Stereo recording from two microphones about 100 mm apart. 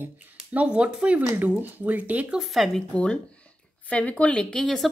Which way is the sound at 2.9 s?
15° left (ahead or behind).